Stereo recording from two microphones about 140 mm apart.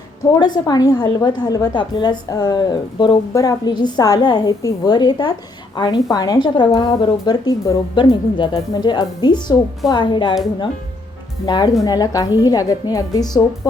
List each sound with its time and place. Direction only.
0.3 s a woman's voice: 30° left (ahead or behind)
11.4 s a woman's voice: 30° left (ahead or behind)